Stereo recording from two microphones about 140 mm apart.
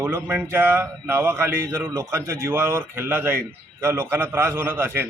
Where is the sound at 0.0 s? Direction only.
15° right (ahead or behind).